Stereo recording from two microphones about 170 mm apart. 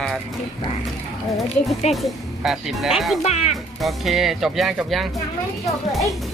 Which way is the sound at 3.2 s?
40° left (ahead or behind).